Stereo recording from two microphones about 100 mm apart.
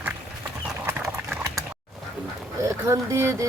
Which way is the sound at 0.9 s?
25° right (ahead or behind).